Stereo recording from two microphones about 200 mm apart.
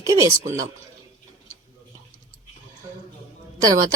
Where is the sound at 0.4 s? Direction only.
40° right (ahead or behind).